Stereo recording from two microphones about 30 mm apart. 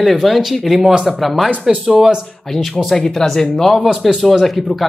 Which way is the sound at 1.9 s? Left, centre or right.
Centre.